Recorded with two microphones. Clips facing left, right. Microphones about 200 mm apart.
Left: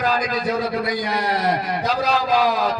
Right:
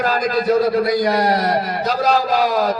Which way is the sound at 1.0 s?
45° right (ahead or behind).